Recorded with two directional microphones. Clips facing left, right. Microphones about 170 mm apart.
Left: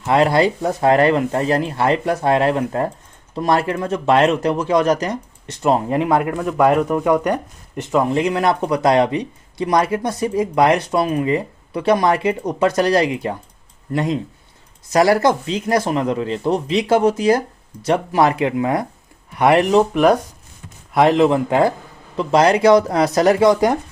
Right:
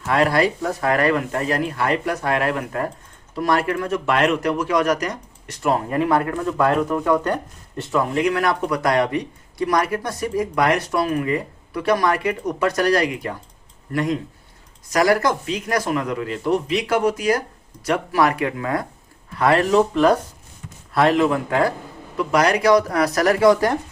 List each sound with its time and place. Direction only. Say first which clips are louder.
0.0 s speech: left 3 dB; 25° left (ahead or behind)